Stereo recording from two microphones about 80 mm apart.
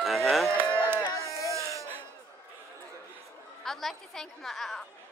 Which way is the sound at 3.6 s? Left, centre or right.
Centre.